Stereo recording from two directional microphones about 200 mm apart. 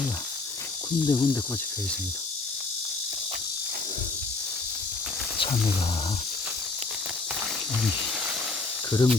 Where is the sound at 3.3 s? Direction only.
40° right (ahead or behind).